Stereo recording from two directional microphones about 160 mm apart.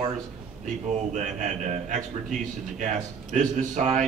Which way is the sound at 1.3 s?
50° right (ahead or behind).